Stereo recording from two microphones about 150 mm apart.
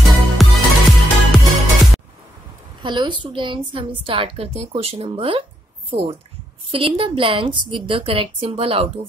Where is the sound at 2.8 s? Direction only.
30° right (ahead or behind).